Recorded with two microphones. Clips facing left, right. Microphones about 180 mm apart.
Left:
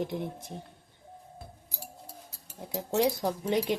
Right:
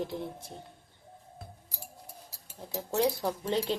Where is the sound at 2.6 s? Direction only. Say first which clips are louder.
Left 2 dB; 15° left (ahead or behind).